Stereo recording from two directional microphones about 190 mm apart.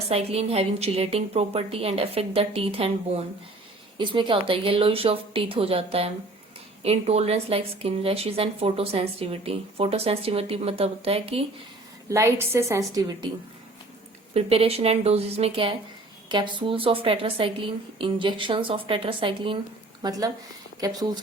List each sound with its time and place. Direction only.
0.1 s a woman's voice: 35° right (ahead or behind)
12.0 s a woman's voice: 15° right (ahead or behind)
14.3 s a woman's voice: 30° right (ahead or behind)